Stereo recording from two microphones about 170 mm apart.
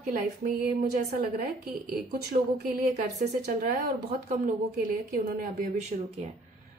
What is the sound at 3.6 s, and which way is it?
Speech, 60° right (ahead or behind).